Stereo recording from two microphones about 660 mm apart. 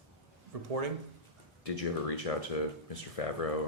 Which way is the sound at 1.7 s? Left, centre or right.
Left.